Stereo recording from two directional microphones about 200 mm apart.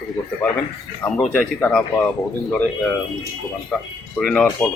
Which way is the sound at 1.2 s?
5° left (ahead or behind).